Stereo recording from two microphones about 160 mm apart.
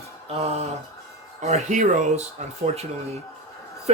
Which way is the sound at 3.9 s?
40° right (ahead or behind).